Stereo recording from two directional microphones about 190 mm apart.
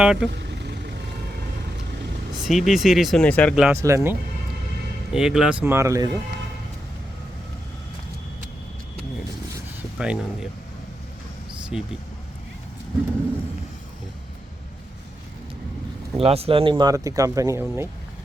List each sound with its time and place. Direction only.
0.0 s speech: 5° right (ahead or behind)
0.3 s vehicle: 65° right (ahead or behind)
2.4 s speech: centre (ahead or behind)
3.5 s speech: 10° right (ahead or behind)
5.1 s speech: 5° right (ahead or behind); by 6.1 s 20° right (ahead or behind)
10.0 s speech: 5° right (ahead or behind)
11.7 s speech: 5° right (ahead or behind)
16.1 s speech: 30° right (ahead or behind); by 17.8 s 15° right (ahead or behind)